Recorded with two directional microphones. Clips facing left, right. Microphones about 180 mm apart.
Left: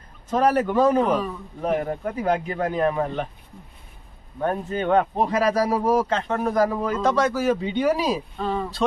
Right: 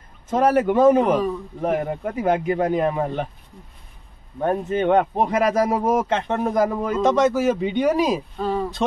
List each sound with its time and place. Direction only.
0.3 s a man's voice: 20° right (ahead or behind)
4.4 s a man's voice: 20° right (ahead or behind)
8.4 s a man's voice: 5° right (ahead or behind)